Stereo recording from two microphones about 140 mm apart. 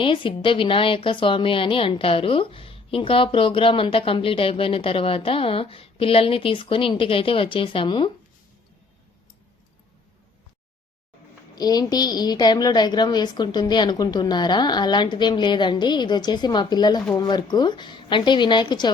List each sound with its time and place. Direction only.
0.0 s a woman's voice: 35° left (ahead or behind)
11.5 s a woman's voice: 30° left (ahead or behind)